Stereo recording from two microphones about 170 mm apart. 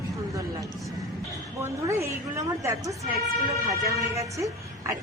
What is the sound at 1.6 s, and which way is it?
Speech, 15° right (ahead or behind).